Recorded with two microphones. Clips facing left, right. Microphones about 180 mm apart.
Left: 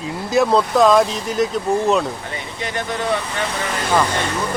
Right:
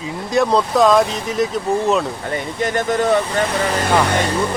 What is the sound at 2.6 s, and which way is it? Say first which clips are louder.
Speech: right 6 dB; 45° right (ahead or behind).